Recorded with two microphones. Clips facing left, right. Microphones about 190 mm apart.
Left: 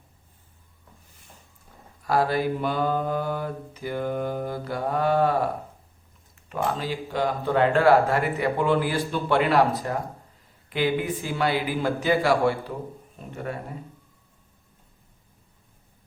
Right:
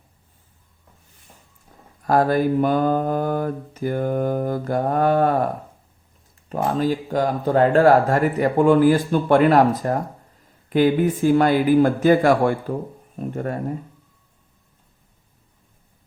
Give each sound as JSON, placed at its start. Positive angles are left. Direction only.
{"t": 2.0, "sound": "speech", "side_deg": -50}
{"t": 6.5, "sound": "speech", "side_deg": -45}